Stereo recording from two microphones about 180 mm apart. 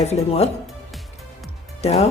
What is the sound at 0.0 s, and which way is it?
Speech, 35° left (ahead or behind).